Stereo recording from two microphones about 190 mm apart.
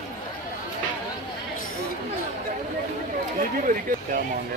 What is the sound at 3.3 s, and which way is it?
Speech, 45° right (ahead or behind).